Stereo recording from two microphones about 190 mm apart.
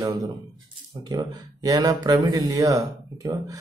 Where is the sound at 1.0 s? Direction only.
20° right (ahead or behind).